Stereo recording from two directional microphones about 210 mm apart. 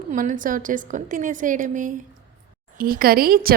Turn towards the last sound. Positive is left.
turn(degrees=-45)  # may be behind; listen again after turning